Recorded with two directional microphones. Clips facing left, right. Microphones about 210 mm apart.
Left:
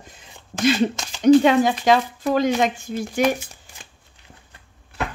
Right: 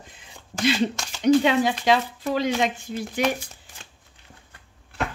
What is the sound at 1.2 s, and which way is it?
Speech, 45° left (ahead or behind).